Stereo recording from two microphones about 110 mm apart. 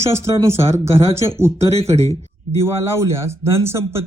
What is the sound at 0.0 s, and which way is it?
Speech, 25° right (ahead or behind).